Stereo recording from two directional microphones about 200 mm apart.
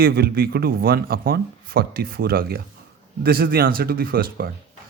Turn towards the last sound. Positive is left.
turn(degrees=-45)  # may be behind; listen again after turning